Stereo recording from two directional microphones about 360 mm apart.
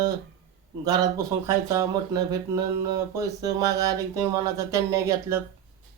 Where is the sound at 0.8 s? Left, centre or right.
Centre.